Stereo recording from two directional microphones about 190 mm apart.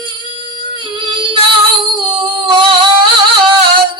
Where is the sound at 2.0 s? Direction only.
25° right (ahead or behind).